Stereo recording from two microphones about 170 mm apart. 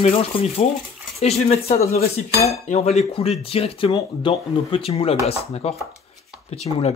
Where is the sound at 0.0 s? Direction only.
35° left (ahead or behind).